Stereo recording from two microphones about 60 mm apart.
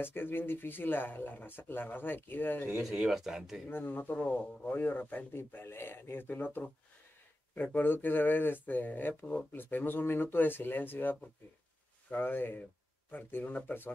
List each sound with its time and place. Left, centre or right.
0.0 s speech: left
2.8 s speech: centre
3.7 s speech: left
4.1 s speech: centre